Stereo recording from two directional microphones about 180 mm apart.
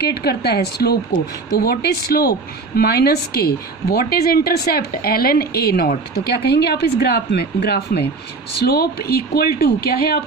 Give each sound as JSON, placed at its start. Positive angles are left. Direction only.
{"t": 0.0, "sound": "a woman's voice", "side_deg": 60}